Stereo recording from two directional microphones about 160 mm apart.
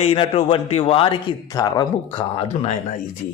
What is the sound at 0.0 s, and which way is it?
A man's voice, 35° left (ahead or behind).